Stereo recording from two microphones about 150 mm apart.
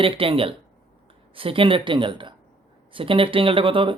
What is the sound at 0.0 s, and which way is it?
Speech, 35° right (ahead or behind).